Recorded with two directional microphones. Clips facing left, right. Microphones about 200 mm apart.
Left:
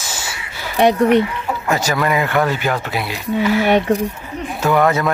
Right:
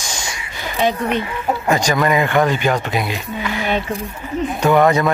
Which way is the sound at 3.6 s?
65° left (ahead or behind).